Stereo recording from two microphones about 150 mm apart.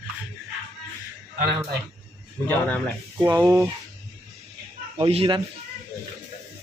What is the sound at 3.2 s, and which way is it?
Speech, 25° right (ahead or behind).